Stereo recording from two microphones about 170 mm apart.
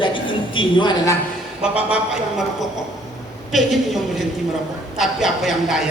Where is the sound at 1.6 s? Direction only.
5° right (ahead or behind).